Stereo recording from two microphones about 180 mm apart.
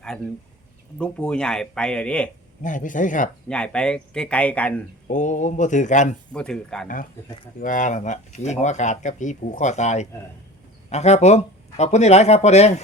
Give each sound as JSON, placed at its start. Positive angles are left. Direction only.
{"t": 0.9, "sound": "speech", "side_deg": 5}
{"t": 2.6, "sound": "speech", "side_deg": 45}
{"t": 3.5, "sound": "speech", "side_deg": 5}
{"t": 5.0, "sound": "speech", "side_deg": 45}
{"t": 6.3, "sound": "speech", "side_deg": 5}
{"t": 6.8, "sound": "speech", "side_deg": 50}